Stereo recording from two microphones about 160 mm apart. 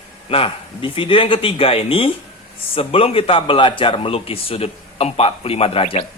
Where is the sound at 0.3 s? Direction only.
35° left (ahead or behind).